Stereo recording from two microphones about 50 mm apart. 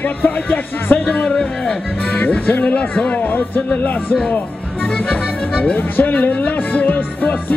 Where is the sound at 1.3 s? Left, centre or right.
Centre.